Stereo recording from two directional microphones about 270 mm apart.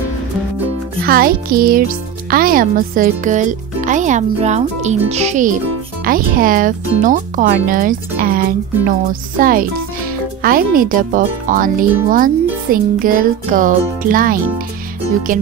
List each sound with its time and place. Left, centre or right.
1.0 s a child's voice: right